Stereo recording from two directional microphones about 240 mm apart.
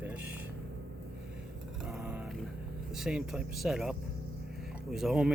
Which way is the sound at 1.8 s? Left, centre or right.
Centre.